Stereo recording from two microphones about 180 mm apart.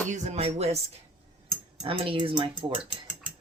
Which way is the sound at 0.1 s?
40° right (ahead or behind).